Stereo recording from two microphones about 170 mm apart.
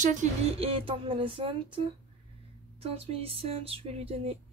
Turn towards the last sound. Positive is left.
turn(degrees=-35)  # may be behind; listen again after turning